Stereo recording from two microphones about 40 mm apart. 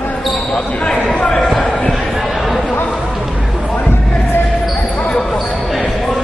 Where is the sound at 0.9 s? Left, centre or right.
Centre.